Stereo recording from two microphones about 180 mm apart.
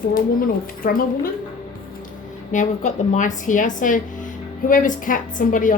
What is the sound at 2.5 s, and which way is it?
Speech, 45° left (ahead or behind).